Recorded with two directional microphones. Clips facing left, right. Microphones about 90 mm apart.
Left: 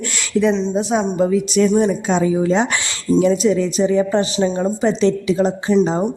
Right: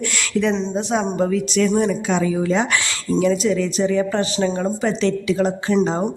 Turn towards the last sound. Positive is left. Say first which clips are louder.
# left 2 dB
turn(degrees=20)  # may be behind; listen again after turning